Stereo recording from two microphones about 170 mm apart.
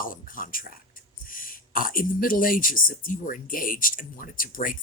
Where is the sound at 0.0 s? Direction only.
55° left (ahead or behind).